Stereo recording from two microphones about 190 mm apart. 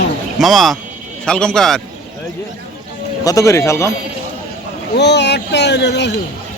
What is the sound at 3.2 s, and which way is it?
Speech, 15° left (ahead or behind).